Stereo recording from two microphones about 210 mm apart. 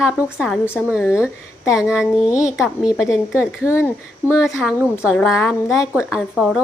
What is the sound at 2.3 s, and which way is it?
Speech, 15° left (ahead or behind).